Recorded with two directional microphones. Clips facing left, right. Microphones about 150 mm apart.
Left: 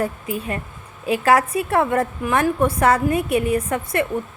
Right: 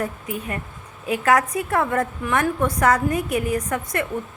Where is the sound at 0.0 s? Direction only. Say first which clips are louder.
Left 3 dB; 25° left (ahead or behind).